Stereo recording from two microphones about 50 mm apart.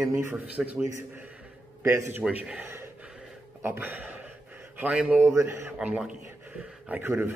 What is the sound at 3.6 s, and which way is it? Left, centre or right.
Speech, right.